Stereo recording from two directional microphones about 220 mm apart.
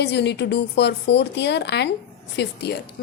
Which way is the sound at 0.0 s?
50° left (ahead or behind).